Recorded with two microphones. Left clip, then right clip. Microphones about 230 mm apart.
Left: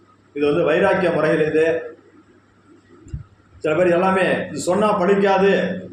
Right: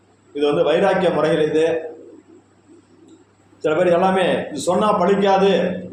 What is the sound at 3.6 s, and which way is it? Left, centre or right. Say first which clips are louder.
A man's voice: right 1 dB; centre.